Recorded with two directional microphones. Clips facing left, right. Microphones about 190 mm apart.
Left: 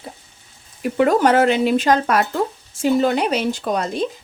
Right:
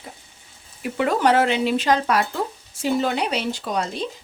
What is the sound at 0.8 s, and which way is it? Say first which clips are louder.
Speech: left 5 dB; 45° left (ahead or behind).